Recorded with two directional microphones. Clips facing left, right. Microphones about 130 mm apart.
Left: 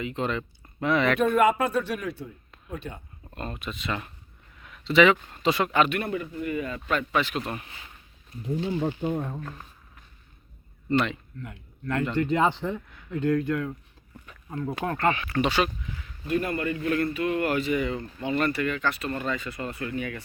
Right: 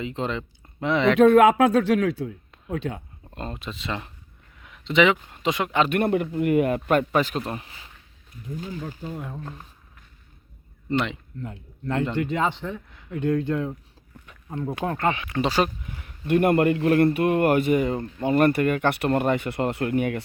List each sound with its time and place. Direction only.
0.0 s speech: 25° right (ahead or behind)
1.2 s speech: 90° right
3.3 s speech: 25° right (ahead or behind)
4.6 s a sound: 20° right (ahead or behind)
5.1 s speech: 15° right (ahead or behind)
5.9 s speech: 60° right (ahead or behind); by 7.9 s 30° right (ahead or behind)
9.0 s speech: 20° left (ahead or behind)
10.8 s speech: 20° right (ahead or behind)
12.4 s speech: 10° left (ahead or behind)
13.1 s speech: 20° right (ahead or behind)
14.3 s a sound: 15° right (ahead or behind)
14.8 s speech: 15° right (ahead or behind)
15.4 s speech: 40° right (ahead or behind)
16.0 s a man's voice: 65° right (ahead or behind)